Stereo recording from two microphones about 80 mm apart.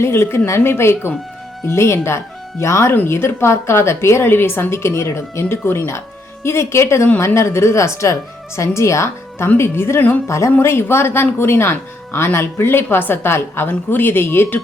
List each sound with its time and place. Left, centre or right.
0.0 s a woman's voice: left